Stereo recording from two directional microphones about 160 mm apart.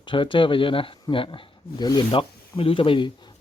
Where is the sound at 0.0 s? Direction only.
30° left (ahead or behind).